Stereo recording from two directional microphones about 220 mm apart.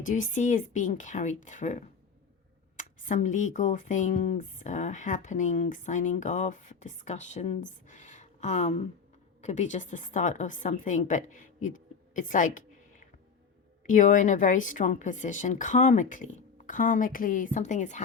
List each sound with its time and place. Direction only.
0.0 s a woman's voice: 35° left (ahead or behind)